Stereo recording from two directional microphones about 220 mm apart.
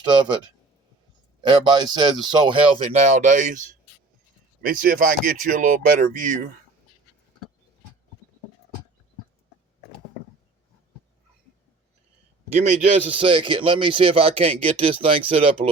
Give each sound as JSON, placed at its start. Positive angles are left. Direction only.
{"t": 1.4, "sound": "speech", "side_deg": -20}
{"t": 2.8, "sound": "speech", "side_deg": -35}
{"t": 12.6, "sound": "speech", "side_deg": -30}